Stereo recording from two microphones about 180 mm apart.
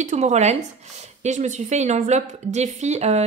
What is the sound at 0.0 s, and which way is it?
A woman's voice, 40° right (ahead or behind).